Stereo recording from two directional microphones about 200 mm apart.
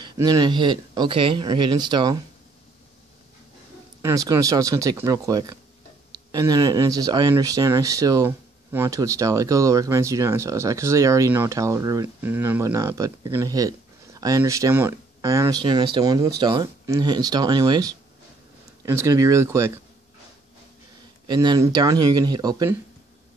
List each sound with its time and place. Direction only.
0.0 s speech: 20° right (ahead or behind)
4.0 s speech: 15° right (ahead or behind)
21.3 s speech: 20° right (ahead or behind)